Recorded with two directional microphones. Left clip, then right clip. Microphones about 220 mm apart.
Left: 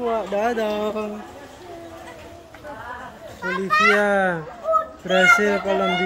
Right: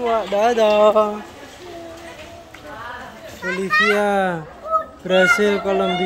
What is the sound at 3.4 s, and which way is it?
Speech, 30° left (ahead or behind).